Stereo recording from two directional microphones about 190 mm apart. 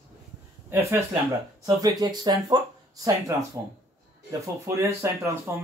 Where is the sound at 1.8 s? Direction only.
20° right (ahead or behind).